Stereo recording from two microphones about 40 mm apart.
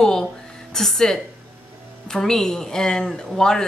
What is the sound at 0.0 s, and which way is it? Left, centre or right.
A woman's voice, centre.